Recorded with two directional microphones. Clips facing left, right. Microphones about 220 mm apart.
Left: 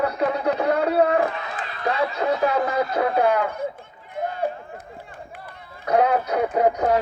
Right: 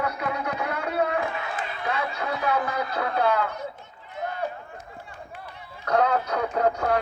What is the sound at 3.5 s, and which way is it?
Run, 50° left (ahead or behind).